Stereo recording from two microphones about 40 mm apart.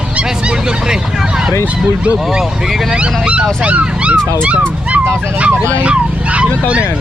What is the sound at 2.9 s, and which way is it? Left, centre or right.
Speech, right.